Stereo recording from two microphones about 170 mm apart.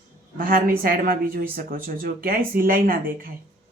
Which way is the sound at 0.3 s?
55° right (ahead or behind).